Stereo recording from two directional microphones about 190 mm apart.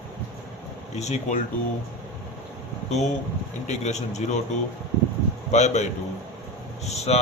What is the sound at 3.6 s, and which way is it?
Speech, 35° left (ahead or behind).